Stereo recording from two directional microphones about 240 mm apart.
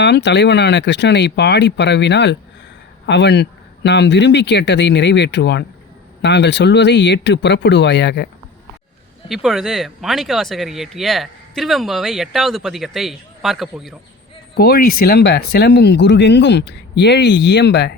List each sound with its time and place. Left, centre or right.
0.0 s speech: left
9.3 s speech: centre
14.5 s speech: left